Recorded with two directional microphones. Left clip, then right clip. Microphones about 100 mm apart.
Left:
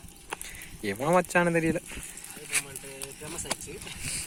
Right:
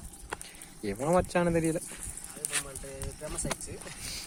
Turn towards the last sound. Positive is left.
turn(degrees=0)  # may be behind; listen again after turning